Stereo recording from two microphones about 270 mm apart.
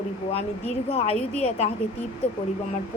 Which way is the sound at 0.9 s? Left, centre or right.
Left.